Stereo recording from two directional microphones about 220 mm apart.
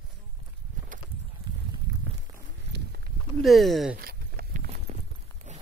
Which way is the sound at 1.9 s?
15° right (ahead or behind).